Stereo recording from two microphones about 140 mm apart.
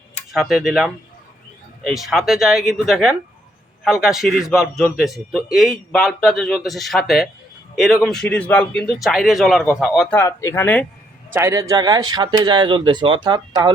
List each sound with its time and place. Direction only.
0.3 s a man's voice: centre (ahead or behind)
10.2 s speech: 20° left (ahead or behind)
11.3 s speech: 20° right (ahead or behind)